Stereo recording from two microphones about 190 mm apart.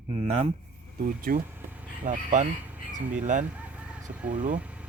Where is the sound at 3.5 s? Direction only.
5° right (ahead or behind).